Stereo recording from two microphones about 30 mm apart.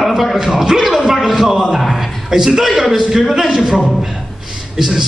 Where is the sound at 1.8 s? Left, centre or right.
Centre.